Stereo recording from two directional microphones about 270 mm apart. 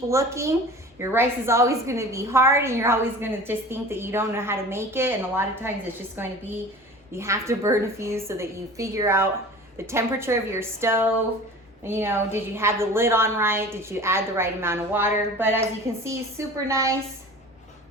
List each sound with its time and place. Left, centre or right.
0.1 s a woman's voice: centre
16.6 s a woman's voice: centre